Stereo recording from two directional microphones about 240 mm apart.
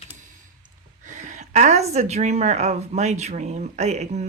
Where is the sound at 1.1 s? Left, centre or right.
Right.